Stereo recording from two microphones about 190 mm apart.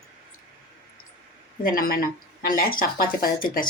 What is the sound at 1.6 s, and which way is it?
A woman's voice, 50° left (ahead or behind).